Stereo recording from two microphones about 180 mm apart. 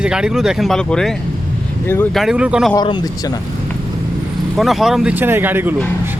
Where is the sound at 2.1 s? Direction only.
5° right (ahead or behind).